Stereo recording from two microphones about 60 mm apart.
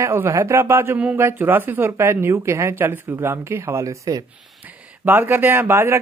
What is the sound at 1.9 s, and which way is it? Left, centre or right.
A man's voice, right.